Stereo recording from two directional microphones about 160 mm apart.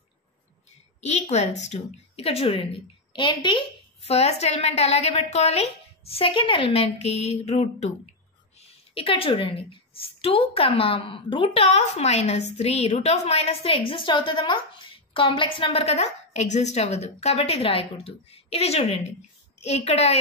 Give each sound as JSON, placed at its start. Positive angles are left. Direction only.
{"t": 1.0, "sound": "a woman's voice", "side_deg": 45}